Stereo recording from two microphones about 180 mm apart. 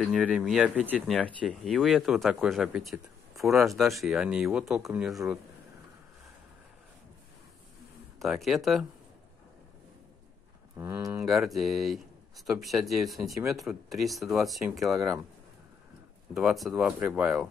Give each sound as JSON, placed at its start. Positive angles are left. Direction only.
{"t": 0.0, "sound": "speech", "side_deg": 0}
{"t": 1.1, "sound": "speech", "side_deg": 5}
{"t": 8.2, "sound": "speech", "side_deg": 0}
{"t": 10.8, "sound": "speech", "side_deg": -15}
{"t": 11.2, "sound": "speech", "side_deg": 0}
{"t": 16.3, "sound": "speech", "side_deg": 0}